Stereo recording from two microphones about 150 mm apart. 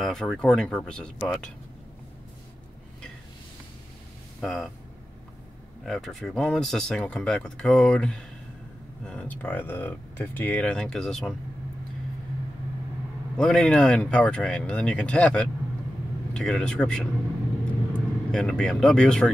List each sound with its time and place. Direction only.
0.0 s speech: 5° left (ahead or behind)
4.4 s speech: centre (ahead or behind)
5.9 s speech: 5° left (ahead or behind)
13.4 s speech: 5° left (ahead or behind)